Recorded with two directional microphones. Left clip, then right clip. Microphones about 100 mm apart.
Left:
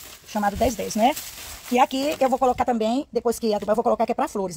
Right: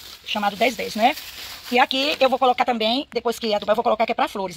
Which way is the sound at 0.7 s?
45° left (ahead or behind).